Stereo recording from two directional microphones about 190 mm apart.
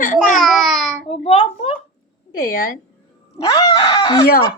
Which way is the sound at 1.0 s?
30° left (ahead or behind).